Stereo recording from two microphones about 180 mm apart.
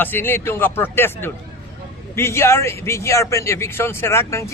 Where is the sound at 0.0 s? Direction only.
10° left (ahead or behind).